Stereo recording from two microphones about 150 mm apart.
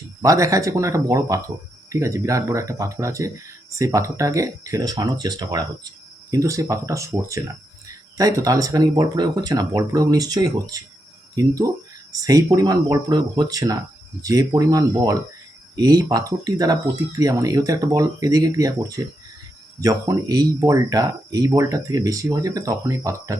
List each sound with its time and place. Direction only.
0.2 s speech: 20° right (ahead or behind)